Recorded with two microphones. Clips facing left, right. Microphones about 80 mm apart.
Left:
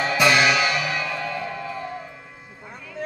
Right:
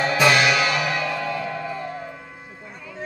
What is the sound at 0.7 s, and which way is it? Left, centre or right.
Music, centre.